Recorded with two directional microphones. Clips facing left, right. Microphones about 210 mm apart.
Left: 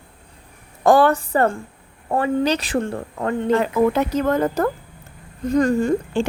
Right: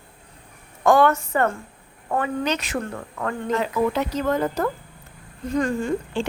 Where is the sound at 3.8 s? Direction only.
50° left (ahead or behind).